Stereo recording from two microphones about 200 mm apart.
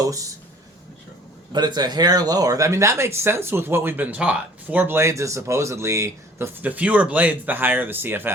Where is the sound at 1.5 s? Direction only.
20° right (ahead or behind).